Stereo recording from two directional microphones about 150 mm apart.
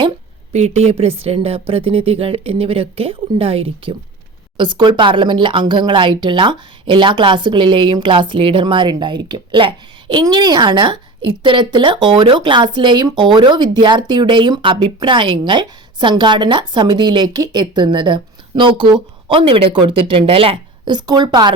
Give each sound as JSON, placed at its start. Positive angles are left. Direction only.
{"t": 0.5, "sound": "a woman's voice", "side_deg": -45}